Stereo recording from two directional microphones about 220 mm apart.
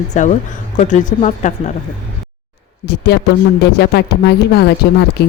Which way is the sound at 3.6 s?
45° left (ahead or behind).